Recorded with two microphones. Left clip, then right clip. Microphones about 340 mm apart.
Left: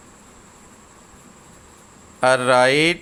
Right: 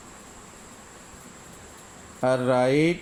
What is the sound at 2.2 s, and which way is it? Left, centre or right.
Speech, left.